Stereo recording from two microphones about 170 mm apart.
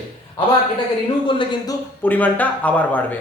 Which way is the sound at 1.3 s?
30° left (ahead or behind).